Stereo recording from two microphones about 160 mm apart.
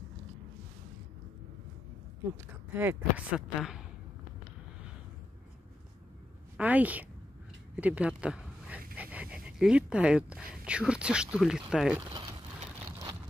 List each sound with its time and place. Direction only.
2.7 s speech: 10° right (ahead or behind)
6.5 s speech: 10° right (ahead or behind)
8.2 s a sound: 5° right (ahead or behind)
8.9 s speech: 10° right (ahead or behind)
12.4 s vehicle: 35° right (ahead or behind)